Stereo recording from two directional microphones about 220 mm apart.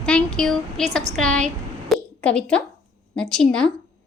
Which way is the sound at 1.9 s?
5° left (ahead or behind).